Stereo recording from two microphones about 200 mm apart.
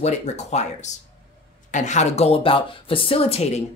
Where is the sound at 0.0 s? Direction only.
35° left (ahead or behind).